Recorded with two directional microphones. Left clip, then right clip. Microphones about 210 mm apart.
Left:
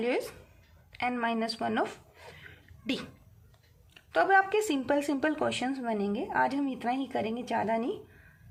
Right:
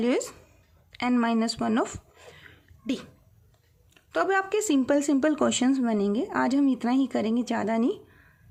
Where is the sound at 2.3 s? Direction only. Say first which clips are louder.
Even; 35° right (ahead or behind).